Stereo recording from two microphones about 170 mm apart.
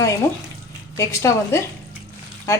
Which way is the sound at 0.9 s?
15° left (ahead or behind).